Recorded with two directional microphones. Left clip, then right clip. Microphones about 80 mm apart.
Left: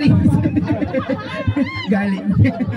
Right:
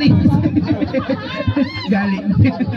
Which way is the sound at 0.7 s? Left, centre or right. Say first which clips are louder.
Right 1 dB; left.